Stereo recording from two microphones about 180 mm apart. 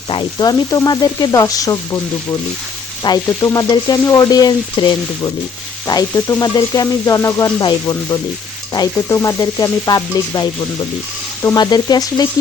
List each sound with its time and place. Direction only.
0.1 s frying: 25° left (ahead or behind)
3.0 s frying: 20° left (ahead or behind)